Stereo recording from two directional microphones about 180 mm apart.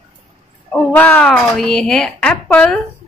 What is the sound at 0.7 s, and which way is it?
Speech, 10° left (ahead or behind).